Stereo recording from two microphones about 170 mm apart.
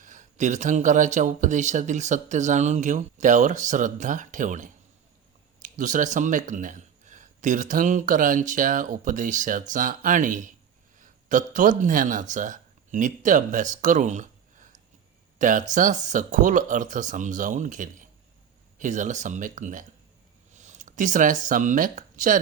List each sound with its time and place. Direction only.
0.0 s speech: 45° right (ahead or behind)